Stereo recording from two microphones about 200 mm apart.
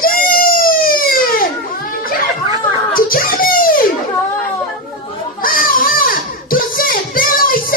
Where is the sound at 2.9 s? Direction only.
45° left (ahead or behind).